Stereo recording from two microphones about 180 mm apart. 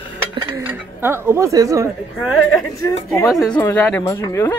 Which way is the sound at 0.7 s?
10° right (ahead or behind).